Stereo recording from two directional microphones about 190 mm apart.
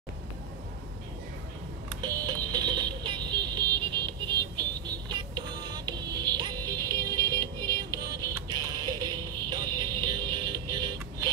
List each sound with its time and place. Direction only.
2.0 s music: 20° right (ahead or behind)